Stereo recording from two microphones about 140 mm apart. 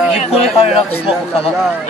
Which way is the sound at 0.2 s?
50° left (ahead or behind).